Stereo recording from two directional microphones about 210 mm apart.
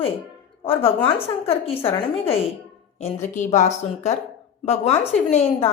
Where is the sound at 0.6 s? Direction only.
25° left (ahead or behind).